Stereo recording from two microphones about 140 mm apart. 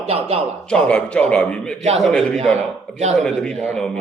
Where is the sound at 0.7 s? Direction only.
10° left (ahead or behind).